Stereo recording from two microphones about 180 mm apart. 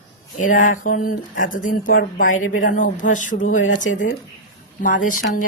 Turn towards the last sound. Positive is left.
turn(degrees=45)  # may be behind; listen again after turning